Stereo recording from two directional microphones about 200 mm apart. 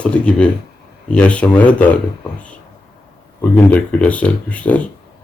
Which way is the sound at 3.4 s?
5° left (ahead or behind).